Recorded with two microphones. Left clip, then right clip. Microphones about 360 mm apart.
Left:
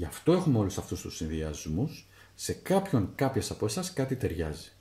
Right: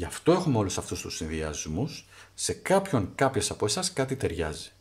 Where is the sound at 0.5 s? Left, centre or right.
Right.